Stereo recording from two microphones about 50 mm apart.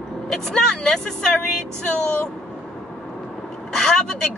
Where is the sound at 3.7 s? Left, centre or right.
Centre.